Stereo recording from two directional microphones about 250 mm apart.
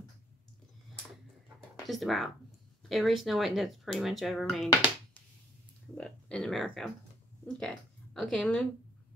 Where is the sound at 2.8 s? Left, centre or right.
Centre.